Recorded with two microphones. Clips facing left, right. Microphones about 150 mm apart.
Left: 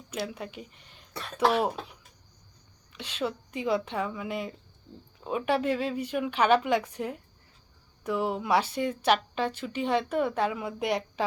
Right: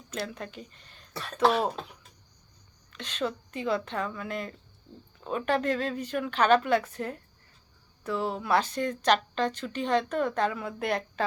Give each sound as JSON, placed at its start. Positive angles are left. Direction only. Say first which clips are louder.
{"t": 0.1, "sound": "speech", "louder": "left 1 dB", "side_deg": 10}
{"t": 2.9, "sound": "speech", "louder": "even", "side_deg": 10}